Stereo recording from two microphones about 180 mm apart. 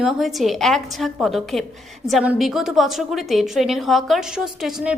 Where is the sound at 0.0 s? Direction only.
Centre (ahead or behind).